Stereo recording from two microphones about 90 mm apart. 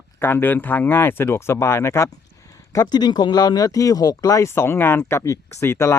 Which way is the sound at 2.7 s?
50° left (ahead or behind).